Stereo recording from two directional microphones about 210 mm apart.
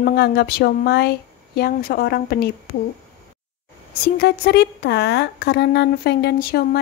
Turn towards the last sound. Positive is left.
turn(degrees=45)  # may be behind; listen again after turning